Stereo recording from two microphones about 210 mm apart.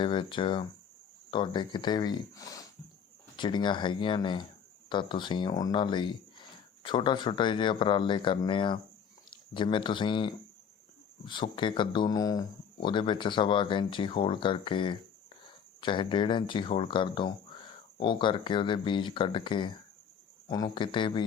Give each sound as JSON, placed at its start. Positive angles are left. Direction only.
{"t": 0.0, "sound": "speech", "side_deg": 25}